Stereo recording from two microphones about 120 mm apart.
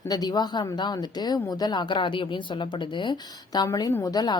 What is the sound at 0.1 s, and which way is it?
Speech, 35° left (ahead or behind).